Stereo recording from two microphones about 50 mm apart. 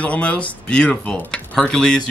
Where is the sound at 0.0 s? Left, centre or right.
Left.